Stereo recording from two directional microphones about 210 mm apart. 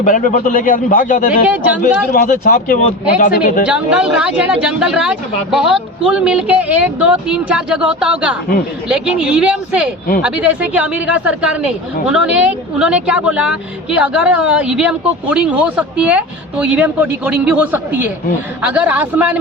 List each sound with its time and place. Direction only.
0.0 s a man's voice: 40° left (ahead or behind)
3.7 s a woman's voice: 5° right (ahead or behind)